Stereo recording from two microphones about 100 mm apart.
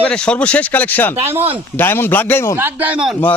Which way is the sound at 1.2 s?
90° right.